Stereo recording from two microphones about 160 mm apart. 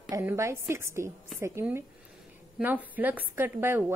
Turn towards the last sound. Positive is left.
turn(degrees=-15)  # may be behind; listen again after turning